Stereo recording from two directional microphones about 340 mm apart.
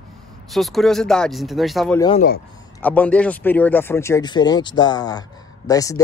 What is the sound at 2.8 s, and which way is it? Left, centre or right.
Speech, centre.